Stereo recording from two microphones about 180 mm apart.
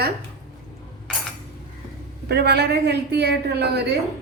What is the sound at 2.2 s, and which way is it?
A woman's voice, 65° right (ahead or behind).